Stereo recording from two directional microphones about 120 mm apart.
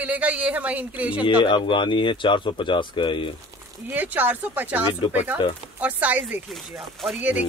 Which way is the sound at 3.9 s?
15° right (ahead or behind).